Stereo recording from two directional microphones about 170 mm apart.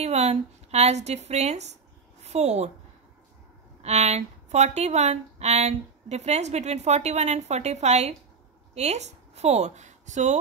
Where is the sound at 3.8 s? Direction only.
40° right (ahead or behind).